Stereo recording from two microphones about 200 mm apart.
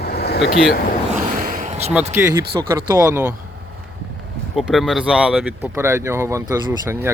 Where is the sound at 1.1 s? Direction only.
40° right (ahead or behind).